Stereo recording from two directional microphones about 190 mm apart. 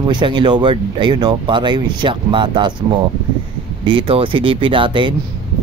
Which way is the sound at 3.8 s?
25° right (ahead or behind).